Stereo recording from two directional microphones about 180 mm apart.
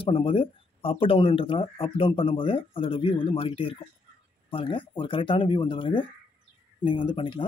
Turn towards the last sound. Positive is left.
turn(degrees=30)  # may be behind; listen again after turning